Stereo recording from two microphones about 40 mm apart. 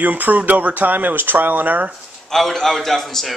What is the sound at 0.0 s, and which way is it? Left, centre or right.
Speech, right.